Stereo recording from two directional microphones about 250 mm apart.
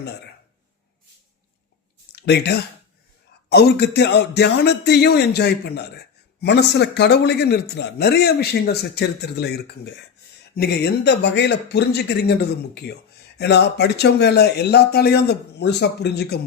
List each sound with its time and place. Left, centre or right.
2.1 s speech: left